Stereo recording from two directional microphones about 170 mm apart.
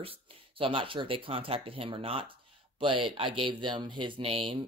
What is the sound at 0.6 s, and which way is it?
Speech, 30° right (ahead or behind).